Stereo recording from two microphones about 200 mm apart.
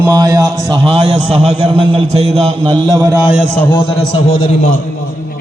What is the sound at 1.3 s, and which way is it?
A man's voice, 30° right (ahead or behind).